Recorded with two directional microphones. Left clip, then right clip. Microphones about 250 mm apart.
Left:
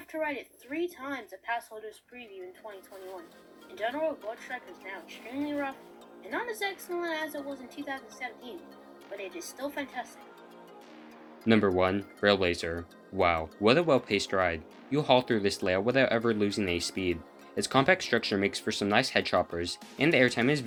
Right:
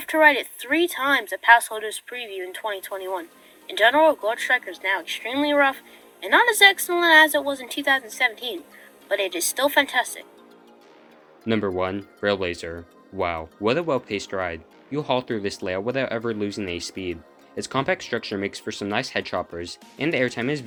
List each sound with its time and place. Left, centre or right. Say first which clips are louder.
0.0 s speech: right 17 dB; right
3.8 s speech: right 15 dB; right
11.4 s speech: right 1 dB; centre